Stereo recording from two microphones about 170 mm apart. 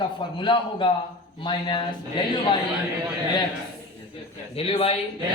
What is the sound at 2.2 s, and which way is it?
Speech, 25° left (ahead or behind).